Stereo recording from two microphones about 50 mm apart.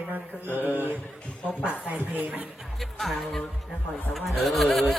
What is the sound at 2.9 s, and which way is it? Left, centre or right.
A man's voice, centre.